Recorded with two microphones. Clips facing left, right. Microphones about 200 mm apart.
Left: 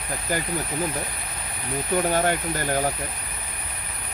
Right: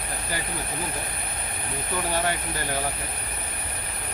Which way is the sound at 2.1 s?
50° left (ahead or behind).